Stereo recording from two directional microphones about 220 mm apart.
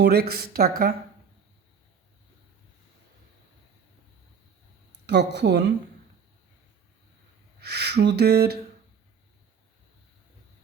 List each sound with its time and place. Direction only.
0.0 s speech: 45° right (ahead or behind)
5.0 s speech: 50° right (ahead or behind)
7.6 s speech: 50° right (ahead or behind)